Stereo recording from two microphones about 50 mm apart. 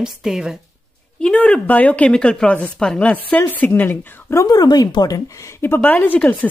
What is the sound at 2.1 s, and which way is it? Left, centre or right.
Speech, centre.